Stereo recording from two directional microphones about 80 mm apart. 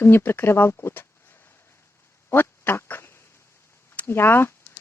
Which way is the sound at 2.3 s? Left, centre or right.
Left.